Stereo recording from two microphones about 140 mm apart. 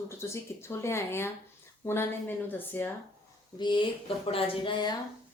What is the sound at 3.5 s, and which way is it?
Speech, 35° left (ahead or behind).